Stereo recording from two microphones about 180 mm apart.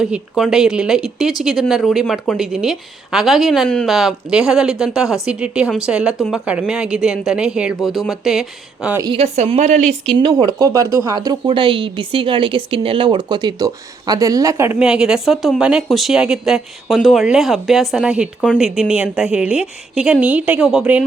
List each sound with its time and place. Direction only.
0.0 s speech: 5° right (ahead or behind)
9.0 s speech: 25° right (ahead or behind)
9.2 s a woman's voice: 35° right (ahead or behind)
10.2 s speech: 25° right (ahead or behind); by 21.0 s 5° right (ahead or behind)